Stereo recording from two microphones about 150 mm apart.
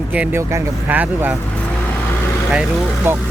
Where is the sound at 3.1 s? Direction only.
15° right (ahead or behind).